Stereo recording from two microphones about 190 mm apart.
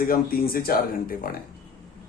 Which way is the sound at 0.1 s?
50° left (ahead or behind).